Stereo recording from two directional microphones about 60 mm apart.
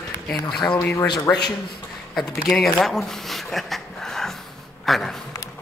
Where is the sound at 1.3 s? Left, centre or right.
Left.